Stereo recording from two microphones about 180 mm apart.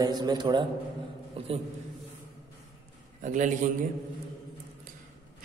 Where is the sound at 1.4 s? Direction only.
30° right (ahead or behind).